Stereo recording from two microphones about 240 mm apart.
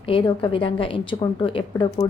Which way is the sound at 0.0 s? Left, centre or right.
Left.